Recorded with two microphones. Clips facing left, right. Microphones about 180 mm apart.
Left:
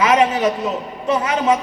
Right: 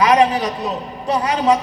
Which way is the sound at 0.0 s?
35° right (ahead or behind).